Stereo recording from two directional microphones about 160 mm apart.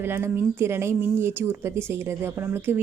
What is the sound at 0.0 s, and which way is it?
A woman's voice, 15° right (ahead or behind).